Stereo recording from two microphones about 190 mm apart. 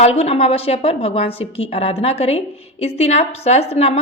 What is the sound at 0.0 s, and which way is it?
A woman's voice, 30° left (ahead or behind).